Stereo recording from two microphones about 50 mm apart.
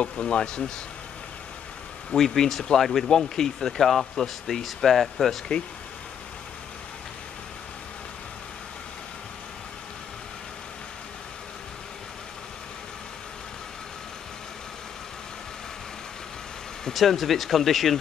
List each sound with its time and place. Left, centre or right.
0.0 s speech: left
2.0 s speech: centre
16.9 s speech: centre